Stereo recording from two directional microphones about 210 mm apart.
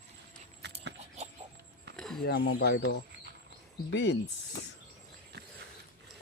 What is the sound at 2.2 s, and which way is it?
Speech, 55° left (ahead or behind).